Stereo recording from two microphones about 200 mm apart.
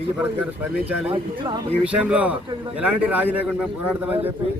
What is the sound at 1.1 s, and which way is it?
Speech, 25° right (ahead or behind).